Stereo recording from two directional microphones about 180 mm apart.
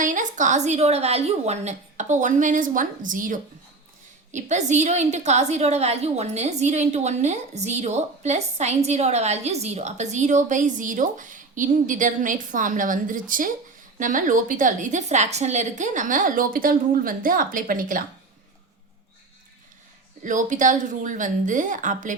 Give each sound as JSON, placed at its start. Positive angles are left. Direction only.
{"t": 0.0, "sound": "a woman's voice", "side_deg": -45}
{"t": 20.2, "sound": "a woman's voice", "side_deg": -45}